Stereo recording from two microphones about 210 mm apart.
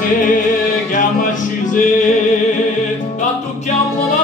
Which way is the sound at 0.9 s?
40° left (ahead or behind).